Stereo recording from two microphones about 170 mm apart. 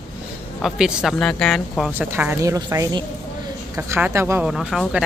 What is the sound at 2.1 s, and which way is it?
A woman's voice, 15° right (ahead or behind).